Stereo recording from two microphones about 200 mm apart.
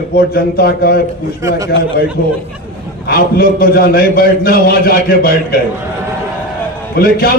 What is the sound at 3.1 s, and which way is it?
A man's voice, 50° left (ahead or behind).